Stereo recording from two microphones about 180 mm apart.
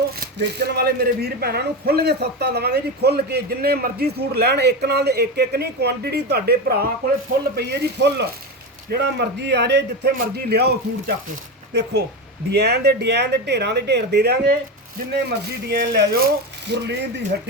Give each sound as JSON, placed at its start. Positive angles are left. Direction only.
{"t": 0.3, "sound": "speech", "side_deg": -65}